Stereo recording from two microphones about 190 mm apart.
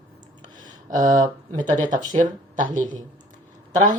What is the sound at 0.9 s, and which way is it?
Speech, 40° right (ahead or behind).